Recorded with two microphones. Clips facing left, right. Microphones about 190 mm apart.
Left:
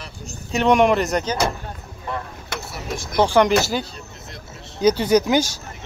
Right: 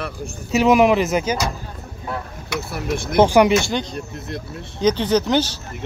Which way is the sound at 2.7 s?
55° right (ahead or behind).